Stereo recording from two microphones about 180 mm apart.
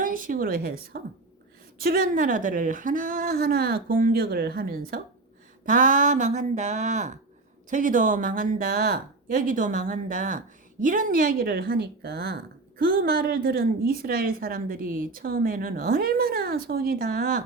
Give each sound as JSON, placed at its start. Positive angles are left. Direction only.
{"t": 0.0, "sound": "a woman's voice", "side_deg": -50}